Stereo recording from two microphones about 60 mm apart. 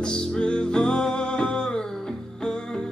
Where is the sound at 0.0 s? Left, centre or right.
Centre.